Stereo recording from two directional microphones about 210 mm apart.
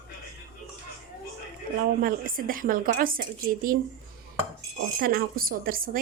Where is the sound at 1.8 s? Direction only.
40° right (ahead or behind).